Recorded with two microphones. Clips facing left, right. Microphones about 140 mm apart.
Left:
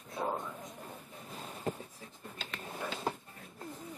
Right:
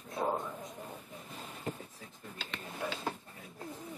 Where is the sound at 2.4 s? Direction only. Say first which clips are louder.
Right 1 dB; centre (ahead or behind).